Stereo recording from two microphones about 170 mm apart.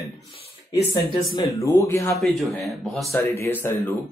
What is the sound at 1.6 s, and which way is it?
Speech, 20° left (ahead or behind).